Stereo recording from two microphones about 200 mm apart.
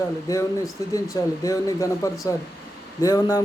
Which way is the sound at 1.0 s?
15° left (ahead or behind).